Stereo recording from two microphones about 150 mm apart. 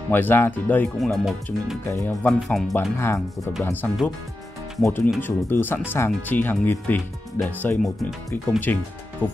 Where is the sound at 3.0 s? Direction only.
20° left (ahead or behind).